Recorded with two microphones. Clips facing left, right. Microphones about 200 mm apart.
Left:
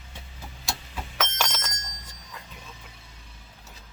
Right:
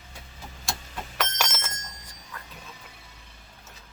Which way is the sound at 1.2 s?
Centre (ahead or behind).